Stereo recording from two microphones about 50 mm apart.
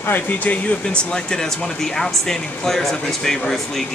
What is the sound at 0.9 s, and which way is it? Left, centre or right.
Speech, centre.